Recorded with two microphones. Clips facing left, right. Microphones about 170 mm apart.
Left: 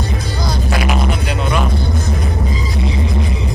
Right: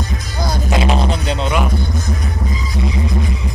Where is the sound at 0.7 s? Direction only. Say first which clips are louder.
Right 2 dB; 25° right (ahead or behind).